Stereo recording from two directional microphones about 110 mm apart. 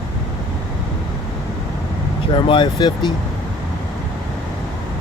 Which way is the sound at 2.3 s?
45° left (ahead or behind).